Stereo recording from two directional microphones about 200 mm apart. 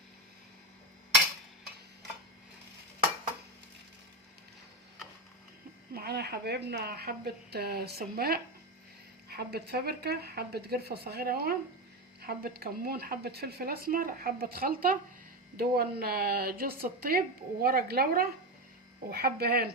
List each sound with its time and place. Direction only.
5.9 s speech: 50° right (ahead or behind)